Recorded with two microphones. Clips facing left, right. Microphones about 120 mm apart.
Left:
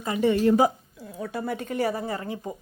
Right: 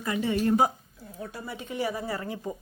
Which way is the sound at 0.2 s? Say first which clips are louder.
Left 6 dB; 65° left (ahead or behind).